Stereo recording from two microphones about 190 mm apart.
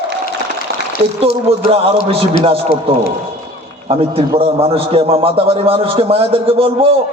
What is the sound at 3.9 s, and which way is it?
A man's voice, 30° right (ahead or behind).